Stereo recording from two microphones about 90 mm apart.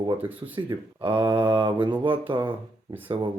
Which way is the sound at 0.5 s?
65° right (ahead or behind).